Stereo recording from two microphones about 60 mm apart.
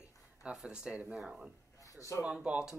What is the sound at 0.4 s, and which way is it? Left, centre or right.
Speech, centre.